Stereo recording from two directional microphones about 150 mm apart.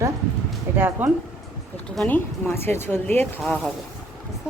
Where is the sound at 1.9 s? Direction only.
10° left (ahead or behind).